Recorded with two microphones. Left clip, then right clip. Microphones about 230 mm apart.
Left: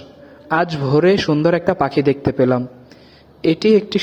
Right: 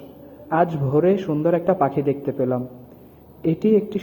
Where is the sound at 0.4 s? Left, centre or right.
Left.